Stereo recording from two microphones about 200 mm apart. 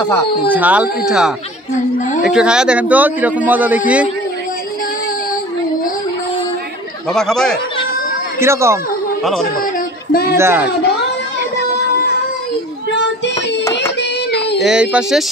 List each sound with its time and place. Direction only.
0.5 s a man's voice: 10° right (ahead or behind)
7.2 s speech: 5° left (ahead or behind)
8.4 s a man's voice: 15° right (ahead or behind)
9.2 s speech: centre (ahead or behind)
10.3 s a man's voice: 10° right (ahead or behind)
12.9 s child singing: 60° left (ahead or behind)
14.6 s speech: 5° right (ahead or behind)